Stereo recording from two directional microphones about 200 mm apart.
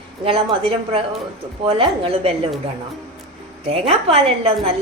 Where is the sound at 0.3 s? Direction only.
30° right (ahead or behind).